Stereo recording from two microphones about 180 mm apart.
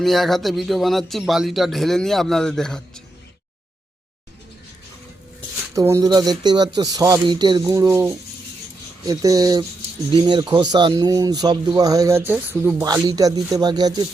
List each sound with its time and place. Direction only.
0.0 s speech: centre (ahead or behind)
5.7 s speech: 15° right (ahead or behind)